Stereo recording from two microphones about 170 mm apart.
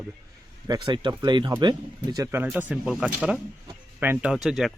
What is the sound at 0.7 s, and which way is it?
Speech, 25° right (ahead or behind).